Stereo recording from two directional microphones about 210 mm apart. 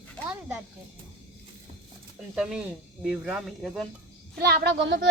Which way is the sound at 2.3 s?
5° right (ahead or behind).